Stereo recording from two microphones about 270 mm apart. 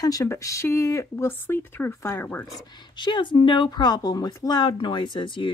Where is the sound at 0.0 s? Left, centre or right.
Centre.